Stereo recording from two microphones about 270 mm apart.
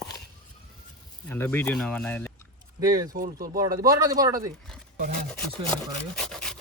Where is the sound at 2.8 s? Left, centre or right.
Centre.